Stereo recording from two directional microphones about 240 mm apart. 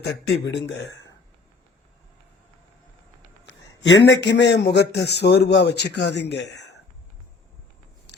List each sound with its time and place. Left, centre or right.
0.0 s a man's voice: left
3.8 s a man's voice: left